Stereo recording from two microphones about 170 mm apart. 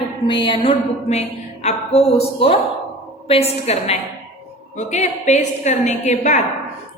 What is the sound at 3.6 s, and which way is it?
A woman's voice, 40° left (ahead or behind).